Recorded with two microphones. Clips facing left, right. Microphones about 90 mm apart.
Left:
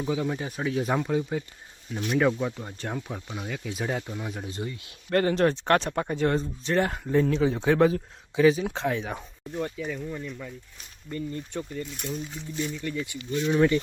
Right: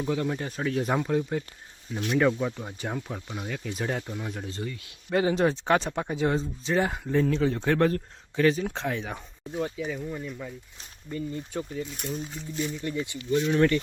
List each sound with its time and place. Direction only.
0.0 s speech: 5° left (ahead or behind)
4.4 s speech: 20° left (ahead or behind)
5.1 s speech: 5° right (ahead or behind)
7.3 s speech: 10° left (ahead or behind)
12.7 s speech: 20° right (ahead or behind)
13.5 s speech: 15° left (ahead or behind)